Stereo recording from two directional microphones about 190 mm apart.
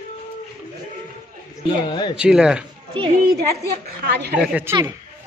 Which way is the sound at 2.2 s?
5° right (ahead or behind).